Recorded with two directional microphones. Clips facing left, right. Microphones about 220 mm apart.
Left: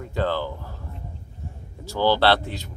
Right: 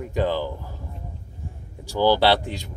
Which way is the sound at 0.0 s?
15° right (ahead or behind).